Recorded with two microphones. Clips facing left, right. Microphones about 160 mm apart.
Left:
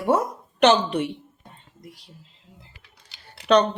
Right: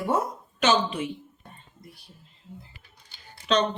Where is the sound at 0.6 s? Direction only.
65° left (ahead or behind).